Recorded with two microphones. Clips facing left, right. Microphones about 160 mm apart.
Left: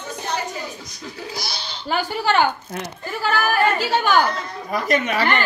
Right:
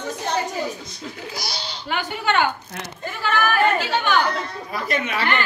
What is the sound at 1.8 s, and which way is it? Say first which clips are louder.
Speech: left 3 dB; 35° left (ahead or behind).